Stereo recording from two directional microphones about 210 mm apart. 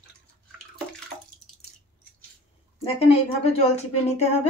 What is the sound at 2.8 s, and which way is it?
A woman's voice, 30° left (ahead or behind).